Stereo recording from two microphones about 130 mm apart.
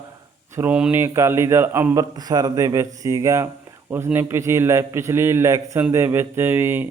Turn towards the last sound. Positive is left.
turn(degrees=-15)  # may be behind; listen again after turning